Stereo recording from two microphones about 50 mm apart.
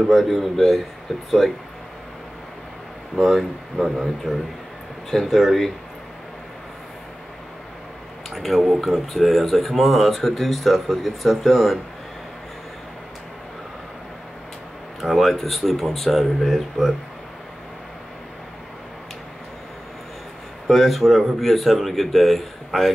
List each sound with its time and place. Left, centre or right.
0.1 s speech: centre
3.2 s speech: centre
8.3 s speech: centre
15.0 s speech: centre
20.6 s speech: centre